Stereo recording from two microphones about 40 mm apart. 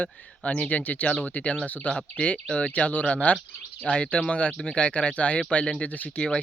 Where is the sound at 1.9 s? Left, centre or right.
Left.